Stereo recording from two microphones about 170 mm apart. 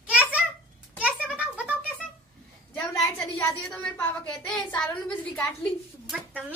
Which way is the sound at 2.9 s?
20° left (ahead or behind).